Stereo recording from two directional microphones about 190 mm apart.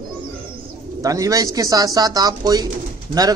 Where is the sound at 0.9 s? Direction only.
15° right (ahead or behind).